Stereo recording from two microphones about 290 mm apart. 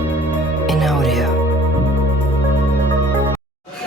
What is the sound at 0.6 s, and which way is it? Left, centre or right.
Music, centre.